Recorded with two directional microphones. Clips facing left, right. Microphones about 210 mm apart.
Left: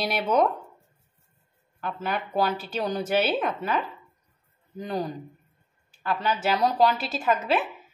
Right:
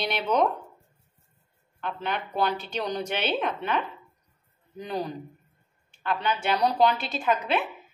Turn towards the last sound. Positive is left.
turn(degrees=5)  # may be behind; listen again after turning